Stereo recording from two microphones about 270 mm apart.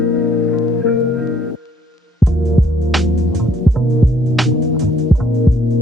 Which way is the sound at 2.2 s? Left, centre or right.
Centre.